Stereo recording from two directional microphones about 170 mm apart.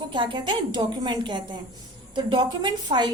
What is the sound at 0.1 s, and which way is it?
A woman's voice, 30° right (ahead or behind).